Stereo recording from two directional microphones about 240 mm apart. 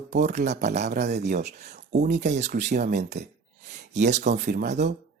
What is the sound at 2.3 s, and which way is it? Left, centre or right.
Speech, right.